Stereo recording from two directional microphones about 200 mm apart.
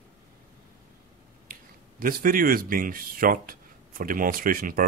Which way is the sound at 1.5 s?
45° right (ahead or behind).